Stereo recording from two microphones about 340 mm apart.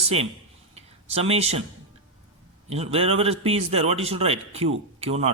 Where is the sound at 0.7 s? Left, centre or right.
Centre.